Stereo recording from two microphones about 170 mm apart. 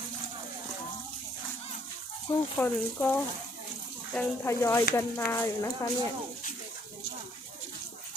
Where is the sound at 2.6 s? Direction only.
10° left (ahead or behind).